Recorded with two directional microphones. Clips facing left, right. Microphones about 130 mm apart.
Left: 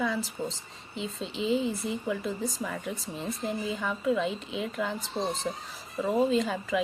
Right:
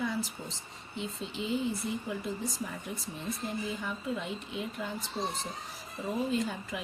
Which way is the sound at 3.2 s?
90° left.